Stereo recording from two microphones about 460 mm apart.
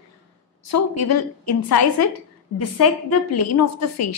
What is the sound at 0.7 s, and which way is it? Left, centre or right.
Speech, left.